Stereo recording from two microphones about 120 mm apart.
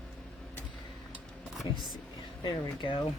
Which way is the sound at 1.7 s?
40° left (ahead or behind).